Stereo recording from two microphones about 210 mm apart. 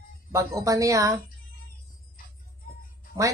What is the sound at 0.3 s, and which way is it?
Speech, 15° right (ahead or behind).